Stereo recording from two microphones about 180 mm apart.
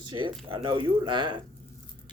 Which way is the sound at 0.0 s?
25° right (ahead or behind).